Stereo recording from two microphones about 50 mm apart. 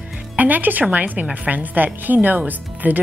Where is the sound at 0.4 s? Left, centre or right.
Right.